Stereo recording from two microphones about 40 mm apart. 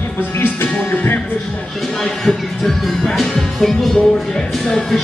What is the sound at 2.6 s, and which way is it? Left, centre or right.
Speech, centre.